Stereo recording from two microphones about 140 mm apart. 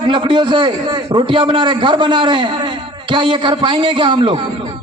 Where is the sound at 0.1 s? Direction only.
35° right (ahead or behind).